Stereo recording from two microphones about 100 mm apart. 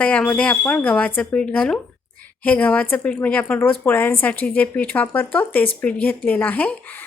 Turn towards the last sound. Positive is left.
turn(degrees=15)  # may be behind; listen again after turning